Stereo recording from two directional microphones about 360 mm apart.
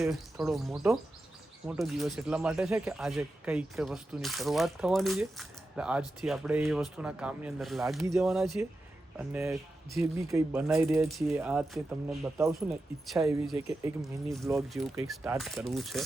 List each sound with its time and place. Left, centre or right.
0.0 s speech: centre